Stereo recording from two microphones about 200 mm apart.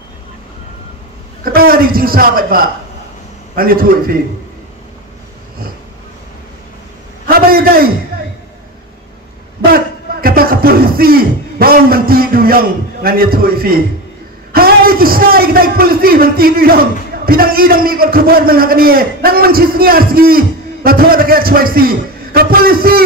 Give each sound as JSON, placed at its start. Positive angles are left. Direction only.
{"t": 1.4, "sound": "a man's voice", "side_deg": -45}
{"t": 7.2, "sound": "a man's voice", "side_deg": -50}
{"t": 9.7, "sound": "music", "side_deg": -50}
{"t": 14.5, "sound": "a man's voice", "side_deg": -50}